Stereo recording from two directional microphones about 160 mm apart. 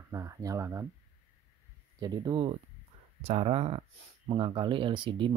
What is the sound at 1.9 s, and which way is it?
Speech, 25° right (ahead or behind).